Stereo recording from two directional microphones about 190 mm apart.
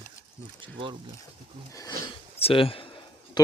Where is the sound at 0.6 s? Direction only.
25° right (ahead or behind).